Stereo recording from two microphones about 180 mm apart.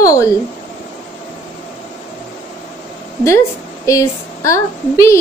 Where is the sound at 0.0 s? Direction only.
20° left (ahead or behind).